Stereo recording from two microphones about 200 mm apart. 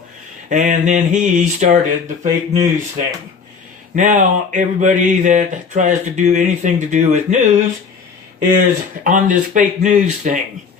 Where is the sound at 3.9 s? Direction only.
40° right (ahead or behind).